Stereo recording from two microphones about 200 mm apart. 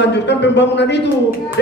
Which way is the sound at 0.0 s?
60° left (ahead or behind).